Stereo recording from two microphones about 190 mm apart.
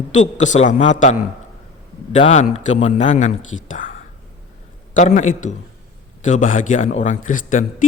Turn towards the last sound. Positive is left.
turn(degrees=45)  # may be behind; listen again after turning